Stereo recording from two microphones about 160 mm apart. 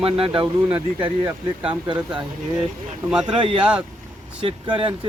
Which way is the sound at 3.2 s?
30° right (ahead or behind).